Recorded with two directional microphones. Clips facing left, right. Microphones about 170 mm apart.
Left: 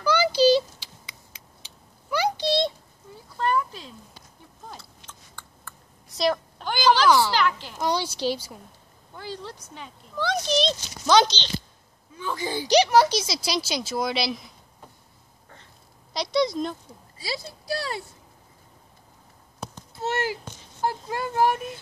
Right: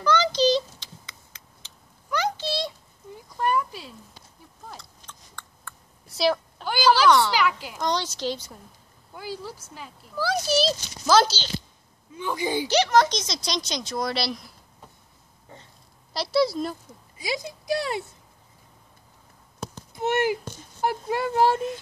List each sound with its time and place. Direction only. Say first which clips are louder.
0.0 s vehicle: left 2 dB; 10° left (ahead or behind)
3.3 s cat: even; 10° right (ahead or behind)
4.6 s a sound: even; 5° left (ahead or behind)
7.3 s a sound: even; 10° right (ahead or behind)
7.8 s speech: left 1 dB; 10° left (ahead or behind)
9.1 s speech: right 1 dB; 10° right (ahead or behind)
12.6 s speech: left 3 dB; 15° left (ahead or behind)
16.1 s speech: right 1 dB; 5° right (ahead or behind)
17.2 s speech: right 3 dB; 15° right (ahead or behind)
19.9 s a sound: right 4 dB; 15° right (ahead or behind)
21.1 s speech: right 2 dB; 25° right (ahead or behind)